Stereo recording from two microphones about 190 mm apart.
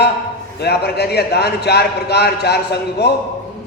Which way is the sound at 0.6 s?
60° left (ahead or behind).